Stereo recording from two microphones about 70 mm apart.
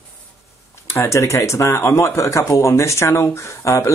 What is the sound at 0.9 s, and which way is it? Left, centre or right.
Speech, left.